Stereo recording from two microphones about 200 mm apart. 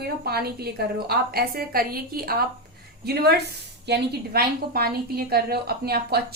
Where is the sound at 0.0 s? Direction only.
50° right (ahead or behind).